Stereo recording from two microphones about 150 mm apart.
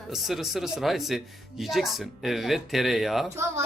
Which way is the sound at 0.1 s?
Centre (ahead or behind).